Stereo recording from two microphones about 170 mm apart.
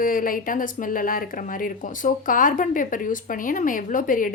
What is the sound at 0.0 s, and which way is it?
Speech, 55° left (ahead or behind).